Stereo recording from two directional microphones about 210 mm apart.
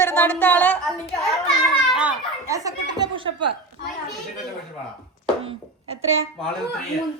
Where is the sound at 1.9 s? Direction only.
10° right (ahead or behind).